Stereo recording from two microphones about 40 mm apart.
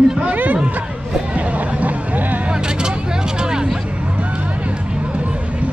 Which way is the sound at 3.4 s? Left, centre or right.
Centre.